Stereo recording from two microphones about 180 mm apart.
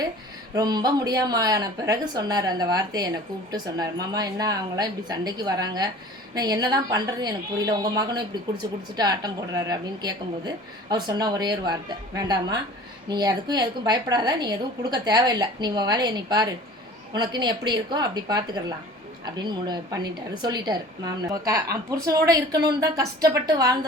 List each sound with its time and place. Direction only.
0.5 s a woman's voice: 20° right (ahead or behind)